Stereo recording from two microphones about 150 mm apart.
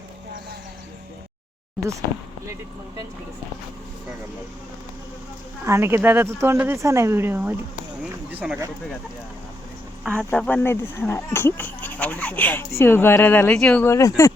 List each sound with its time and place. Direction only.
5.6 s speech: 15° right (ahead or behind)
10.3 s speech: 10° left (ahead or behind)
13.8 s speech: 20° left (ahead or behind)